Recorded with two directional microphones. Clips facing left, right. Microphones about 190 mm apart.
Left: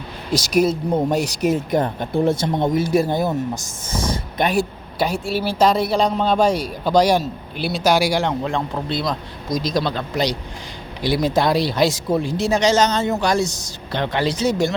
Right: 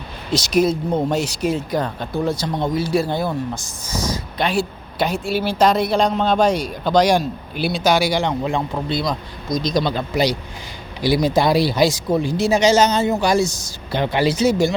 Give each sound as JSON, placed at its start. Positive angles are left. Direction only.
{"t": 0.3, "sound": "speech", "side_deg": 10}
{"t": 4.5, "sound": "speech", "side_deg": 10}